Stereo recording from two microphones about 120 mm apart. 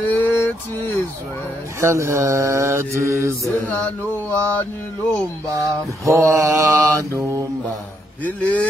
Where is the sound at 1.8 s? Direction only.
25° right (ahead or behind).